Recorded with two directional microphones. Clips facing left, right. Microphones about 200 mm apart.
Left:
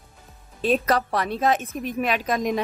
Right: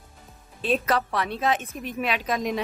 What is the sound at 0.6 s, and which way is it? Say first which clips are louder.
Speech: left 3 dB; 40° left (ahead or behind).